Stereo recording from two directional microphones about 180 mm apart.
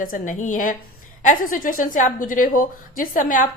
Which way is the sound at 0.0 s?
50° left (ahead or behind).